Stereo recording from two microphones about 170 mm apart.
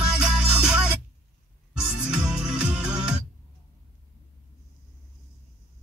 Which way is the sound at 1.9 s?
5° right (ahead or behind).